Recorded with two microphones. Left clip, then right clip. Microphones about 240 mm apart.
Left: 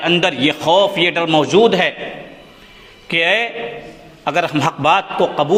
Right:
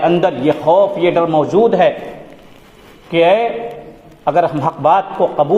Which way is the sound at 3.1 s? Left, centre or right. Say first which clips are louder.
Right 4 dB; left.